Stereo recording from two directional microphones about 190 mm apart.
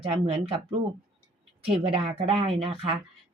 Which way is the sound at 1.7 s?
30° right (ahead or behind).